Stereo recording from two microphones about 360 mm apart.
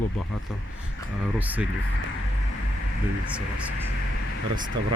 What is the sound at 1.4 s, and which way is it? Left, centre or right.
Speech, centre.